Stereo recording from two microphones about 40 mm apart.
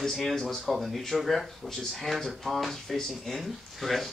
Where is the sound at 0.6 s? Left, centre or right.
Centre.